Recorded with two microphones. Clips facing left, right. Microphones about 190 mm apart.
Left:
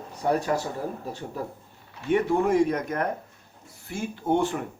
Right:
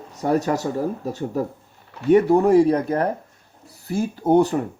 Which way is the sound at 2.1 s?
40° right (ahead or behind).